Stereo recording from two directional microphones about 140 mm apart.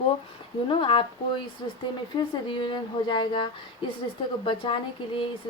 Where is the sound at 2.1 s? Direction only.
35° left (ahead or behind).